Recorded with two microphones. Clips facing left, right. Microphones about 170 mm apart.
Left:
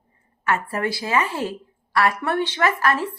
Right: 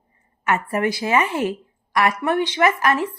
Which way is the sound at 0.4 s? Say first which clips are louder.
Right 3 dB; 20° right (ahead or behind).